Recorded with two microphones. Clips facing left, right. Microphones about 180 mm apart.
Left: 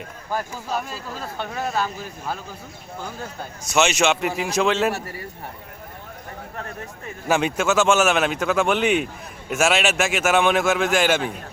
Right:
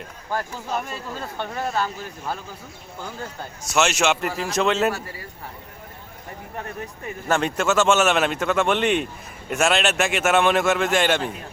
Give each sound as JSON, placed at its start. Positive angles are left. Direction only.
{"t": 0.3, "sound": "speech", "side_deg": 5}
{"t": 3.8, "sound": "speech", "side_deg": 0}
{"t": 7.3, "sound": "speech", "side_deg": 5}